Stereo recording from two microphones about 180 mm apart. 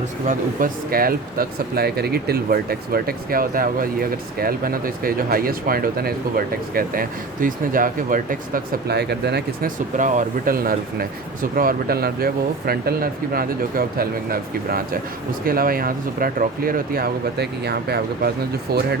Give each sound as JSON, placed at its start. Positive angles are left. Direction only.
{"t": 0.3, "sound": "speech", "side_deg": -50}
{"t": 10.0, "sound": "speech", "side_deg": -45}